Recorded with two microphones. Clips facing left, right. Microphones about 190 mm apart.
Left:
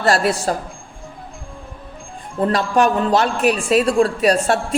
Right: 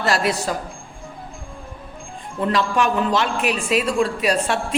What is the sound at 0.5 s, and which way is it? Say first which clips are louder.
Speech: left 4 dB; 45° left (ahead or behind).